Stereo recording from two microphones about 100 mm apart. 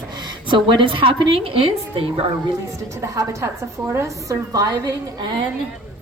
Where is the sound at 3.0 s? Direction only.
30° right (ahead or behind).